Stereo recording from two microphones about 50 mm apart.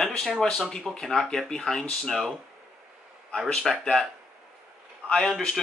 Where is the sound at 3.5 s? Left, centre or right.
Centre.